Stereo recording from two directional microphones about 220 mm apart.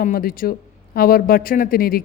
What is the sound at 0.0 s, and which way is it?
Speech, 40° left (ahead or behind).